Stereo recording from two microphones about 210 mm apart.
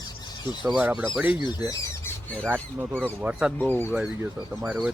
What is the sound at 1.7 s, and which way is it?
Squawk, 15° left (ahead or behind).